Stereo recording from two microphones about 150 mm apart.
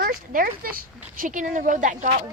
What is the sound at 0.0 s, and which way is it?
Speech, 75° right (ahead or behind).